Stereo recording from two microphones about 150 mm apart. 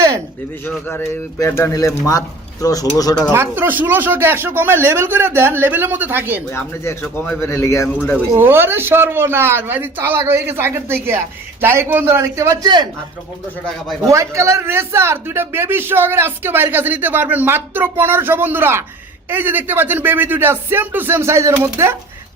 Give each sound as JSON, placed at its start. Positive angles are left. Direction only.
{"t": 0.9, "sound": "speech", "side_deg": 15}
{"t": 3.3, "sound": "speech", "side_deg": -15}
{"t": 6.5, "sound": "speech", "side_deg": 15}
{"t": 8.4, "sound": "speech", "side_deg": -15}
{"t": 14.1, "sound": "speech", "side_deg": -20}